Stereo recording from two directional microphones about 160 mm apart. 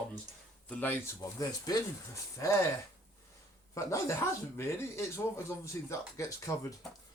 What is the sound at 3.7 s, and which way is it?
Speech, 20° left (ahead or behind).